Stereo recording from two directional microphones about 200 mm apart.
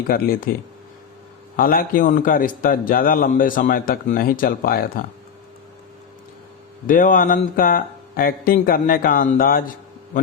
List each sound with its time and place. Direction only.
0.1 s a man's voice: 50° left (ahead or behind)
1.5 s a man's voice: 45° left (ahead or behind)
6.8 s a man's voice: 45° left (ahead or behind)